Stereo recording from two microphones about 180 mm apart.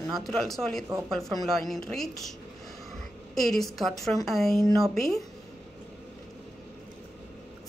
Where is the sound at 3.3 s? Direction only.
Centre (ahead or behind).